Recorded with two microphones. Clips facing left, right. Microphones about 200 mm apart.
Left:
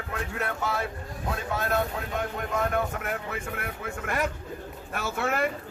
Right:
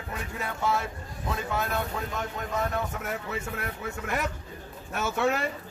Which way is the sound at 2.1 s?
55° left (ahead or behind).